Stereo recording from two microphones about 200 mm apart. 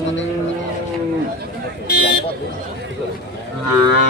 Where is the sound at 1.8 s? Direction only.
50° left (ahead or behind).